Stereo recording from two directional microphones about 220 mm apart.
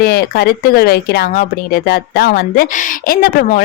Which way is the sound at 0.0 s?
45° left (ahead or behind).